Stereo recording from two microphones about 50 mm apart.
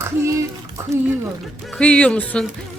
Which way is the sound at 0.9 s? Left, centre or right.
Right.